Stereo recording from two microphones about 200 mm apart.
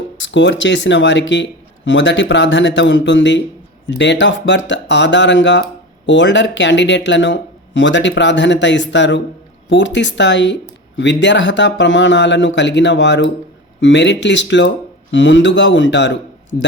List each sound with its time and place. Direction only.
0.2 s speech: 65° left (ahead or behind)